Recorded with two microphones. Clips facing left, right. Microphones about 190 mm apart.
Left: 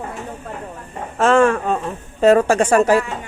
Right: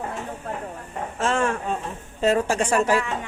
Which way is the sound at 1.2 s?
90° left.